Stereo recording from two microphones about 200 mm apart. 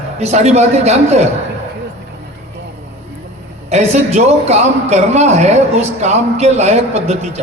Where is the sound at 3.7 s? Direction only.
35° right (ahead or behind).